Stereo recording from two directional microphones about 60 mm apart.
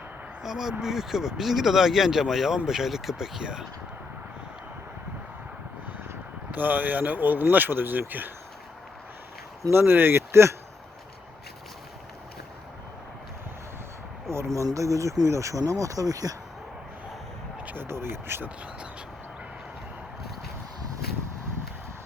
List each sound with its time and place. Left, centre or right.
0.4 s speech: centre
6.5 s speech: right
9.7 s speech: right
14.5 s speech: right
17.6 s vehicle: right
17.8 s speech: right